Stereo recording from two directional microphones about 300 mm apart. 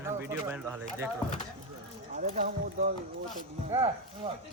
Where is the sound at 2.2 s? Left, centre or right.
Right.